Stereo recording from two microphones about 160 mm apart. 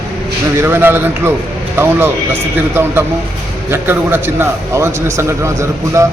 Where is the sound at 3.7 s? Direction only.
15° right (ahead or behind).